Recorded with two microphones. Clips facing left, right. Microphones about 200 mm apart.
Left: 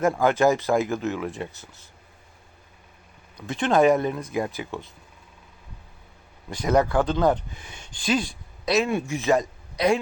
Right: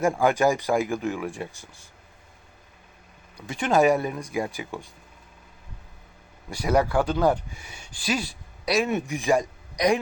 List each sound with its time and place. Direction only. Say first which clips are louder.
0.0 s speech: left 1 dB; 10° right (ahead or behind)
3.3 s speech: left 1 dB; 10° right (ahead or behind)
6.5 s speech: left 1 dB; 10° right (ahead or behind)